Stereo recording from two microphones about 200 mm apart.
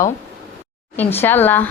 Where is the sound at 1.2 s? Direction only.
10° left (ahead or behind).